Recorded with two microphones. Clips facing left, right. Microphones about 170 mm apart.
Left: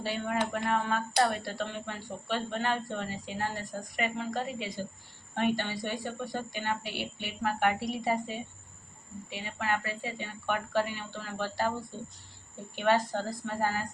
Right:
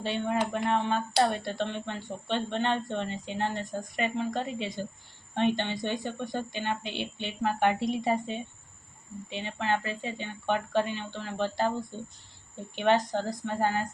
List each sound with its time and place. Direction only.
0.0 s a woman's voice: 25° right (ahead or behind)
12.7 s a woman's voice: 20° right (ahead or behind)